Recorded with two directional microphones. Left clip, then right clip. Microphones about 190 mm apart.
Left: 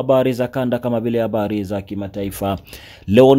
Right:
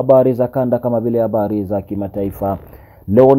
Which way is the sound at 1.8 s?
10° left (ahead or behind).